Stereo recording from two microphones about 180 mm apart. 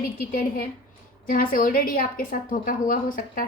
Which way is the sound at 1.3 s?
50° left (ahead or behind).